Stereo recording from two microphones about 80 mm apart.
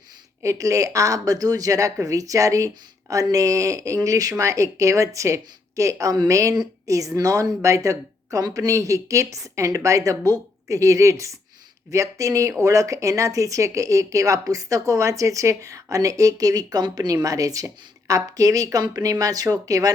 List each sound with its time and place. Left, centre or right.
0.4 s speech: right
17.2 s speech: right